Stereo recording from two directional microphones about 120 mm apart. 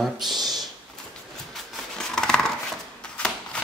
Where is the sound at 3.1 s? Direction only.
10° left (ahead or behind).